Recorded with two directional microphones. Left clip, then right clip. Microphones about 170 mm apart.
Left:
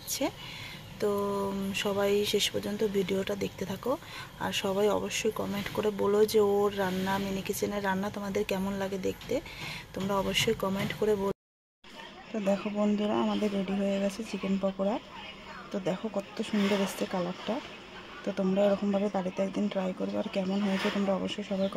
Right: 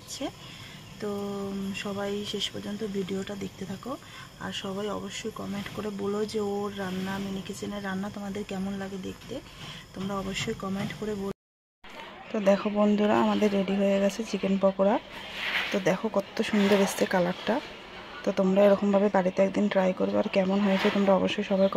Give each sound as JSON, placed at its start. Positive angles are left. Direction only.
{"t": 1.7, "sound": "speech", "side_deg": 15}
{"t": 12.3, "sound": "speech", "side_deg": -10}